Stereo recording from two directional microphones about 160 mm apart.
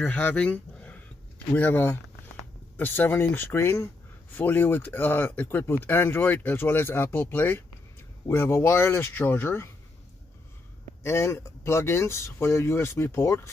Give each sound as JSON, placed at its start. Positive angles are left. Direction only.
{"t": 0.0, "sound": "speech", "side_deg": 10}
{"t": 11.0, "sound": "speech", "side_deg": 15}